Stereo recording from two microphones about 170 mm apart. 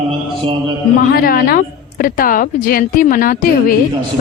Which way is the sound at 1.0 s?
60° left (ahead or behind).